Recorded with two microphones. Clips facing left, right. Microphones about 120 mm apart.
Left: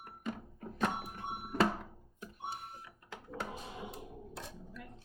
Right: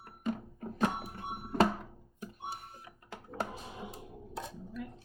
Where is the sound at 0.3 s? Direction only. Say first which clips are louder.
Right 3 dB; 5° right (ahead or behind).